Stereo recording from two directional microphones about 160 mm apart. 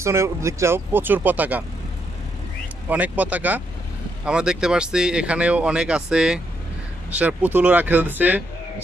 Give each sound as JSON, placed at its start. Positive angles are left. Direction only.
{"t": 0.0, "sound": "speech", "side_deg": -15}
{"t": 2.9, "sound": "speech", "side_deg": -10}